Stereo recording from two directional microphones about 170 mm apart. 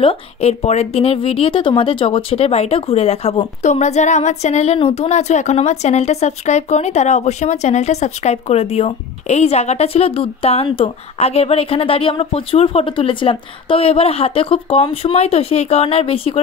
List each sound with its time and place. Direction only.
0.0 s a woman's voice: 35° left (ahead or behind)